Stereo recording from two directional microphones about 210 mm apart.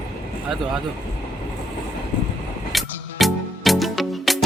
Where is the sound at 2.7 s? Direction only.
Centre (ahead or behind).